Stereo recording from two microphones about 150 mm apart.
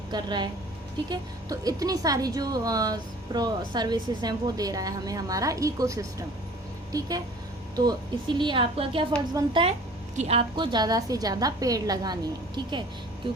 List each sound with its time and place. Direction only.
0.1 s a woman's voice: 30° right (ahead or behind)
10.5 s a woman's voice: 30° right (ahead or behind)